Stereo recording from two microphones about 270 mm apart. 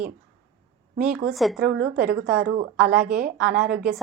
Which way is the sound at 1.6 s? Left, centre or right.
Right.